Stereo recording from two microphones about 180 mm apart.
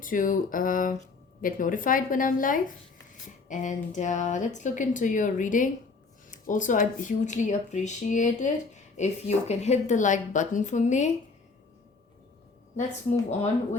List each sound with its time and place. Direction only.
0.0 s speech: 50° left (ahead or behind)